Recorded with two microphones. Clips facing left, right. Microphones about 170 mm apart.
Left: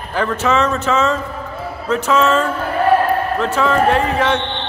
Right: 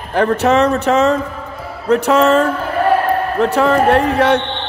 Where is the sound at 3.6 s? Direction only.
60° right (ahead or behind).